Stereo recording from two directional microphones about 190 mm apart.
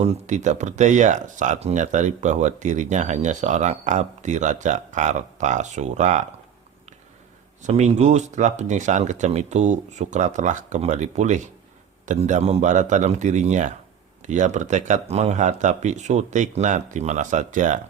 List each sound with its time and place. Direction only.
0.0 s speech: 40° right (ahead or behind)
7.7 s speech: 35° right (ahead or behind)